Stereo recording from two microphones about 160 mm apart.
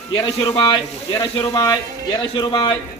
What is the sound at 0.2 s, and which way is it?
Speech, 30° left (ahead or behind).